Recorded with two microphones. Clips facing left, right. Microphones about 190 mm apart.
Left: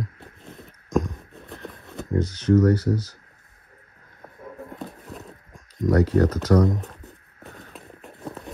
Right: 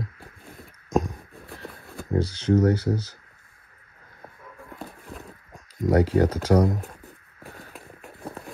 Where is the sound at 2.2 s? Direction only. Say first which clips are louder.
Left 2 dB; 30° right (ahead or behind).